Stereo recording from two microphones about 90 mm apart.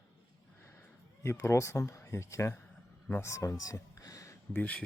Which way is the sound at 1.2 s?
30° left (ahead or behind).